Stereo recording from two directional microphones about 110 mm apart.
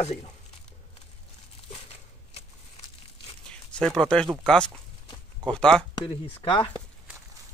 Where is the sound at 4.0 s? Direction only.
5° left (ahead or behind).